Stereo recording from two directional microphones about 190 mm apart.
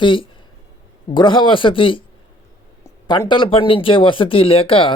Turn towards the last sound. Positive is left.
turn(degrees=30)  # may be behind; listen again after turning